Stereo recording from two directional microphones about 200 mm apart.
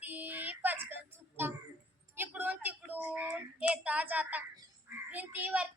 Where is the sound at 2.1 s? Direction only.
10° right (ahead or behind).